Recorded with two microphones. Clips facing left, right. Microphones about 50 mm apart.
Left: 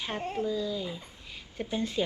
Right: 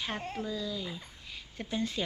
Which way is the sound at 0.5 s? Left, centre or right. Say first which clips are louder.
Left 4 dB; centre.